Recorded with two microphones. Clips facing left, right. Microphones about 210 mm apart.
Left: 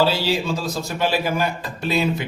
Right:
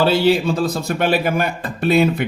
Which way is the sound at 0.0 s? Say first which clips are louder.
Right 5 dB; 55° right (ahead or behind).